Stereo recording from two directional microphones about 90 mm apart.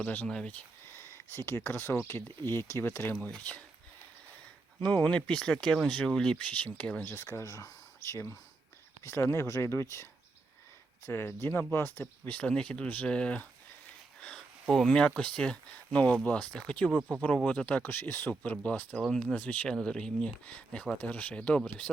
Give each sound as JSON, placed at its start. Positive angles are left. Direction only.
{"t": 0.0, "sound": "speech", "side_deg": 20}
{"t": 0.9, "sound": "speech", "side_deg": 30}
{"t": 3.2, "sound": "speech", "side_deg": 15}
{"t": 4.8, "sound": "speech", "side_deg": 15}
{"t": 7.0, "sound": "speech", "side_deg": 30}
{"t": 16.9, "sound": "speech", "side_deg": -10}
{"t": 17.4, "sound": "speech", "side_deg": 15}